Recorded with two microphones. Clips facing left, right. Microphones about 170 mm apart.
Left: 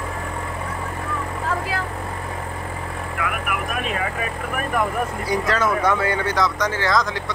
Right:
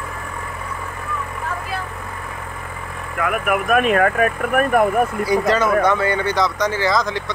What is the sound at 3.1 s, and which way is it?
Speech, 45° right (ahead or behind).